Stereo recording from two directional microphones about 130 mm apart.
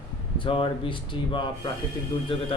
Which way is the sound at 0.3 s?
40° left (ahead or behind).